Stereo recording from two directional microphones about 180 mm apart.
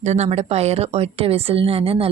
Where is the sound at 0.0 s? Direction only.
40° right (ahead or behind).